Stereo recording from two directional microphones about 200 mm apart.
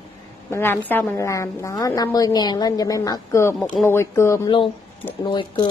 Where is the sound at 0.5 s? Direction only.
10° left (ahead or behind).